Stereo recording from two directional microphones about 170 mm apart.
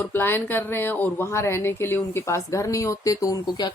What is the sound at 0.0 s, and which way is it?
Speech, 10° left (ahead or behind).